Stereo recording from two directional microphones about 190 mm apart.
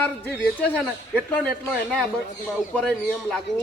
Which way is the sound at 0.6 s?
5° left (ahead or behind).